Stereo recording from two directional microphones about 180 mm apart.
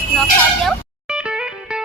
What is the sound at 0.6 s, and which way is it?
Music, 5° right (ahead or behind).